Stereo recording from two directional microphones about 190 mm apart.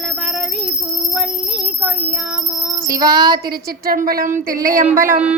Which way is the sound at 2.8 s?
20° right (ahead or behind).